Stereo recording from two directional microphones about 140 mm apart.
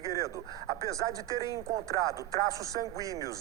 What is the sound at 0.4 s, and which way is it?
Speech, 30° left (ahead or behind).